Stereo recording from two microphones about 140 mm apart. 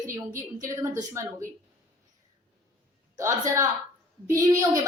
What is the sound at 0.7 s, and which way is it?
Speech, 20° right (ahead or behind).